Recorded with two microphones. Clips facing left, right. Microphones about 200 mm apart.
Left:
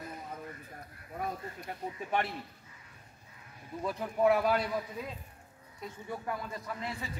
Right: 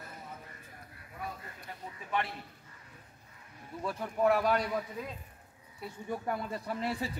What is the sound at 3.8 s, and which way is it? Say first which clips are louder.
Speech: left 1 dB; 5° left (ahead or behind).